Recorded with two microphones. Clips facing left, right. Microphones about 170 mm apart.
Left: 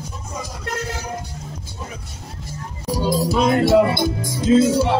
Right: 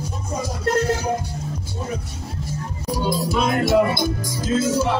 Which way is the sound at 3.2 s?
35° left (ahead or behind).